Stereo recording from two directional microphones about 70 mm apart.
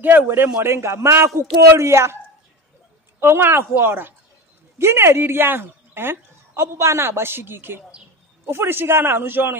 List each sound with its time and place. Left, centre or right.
0.0 s a woman's voice: right
3.2 s a woman's voice: right